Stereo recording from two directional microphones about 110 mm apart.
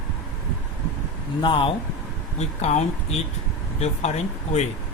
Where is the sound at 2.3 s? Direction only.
80° left.